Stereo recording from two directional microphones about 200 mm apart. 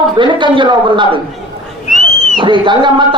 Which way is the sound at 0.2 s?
25° right (ahead or behind).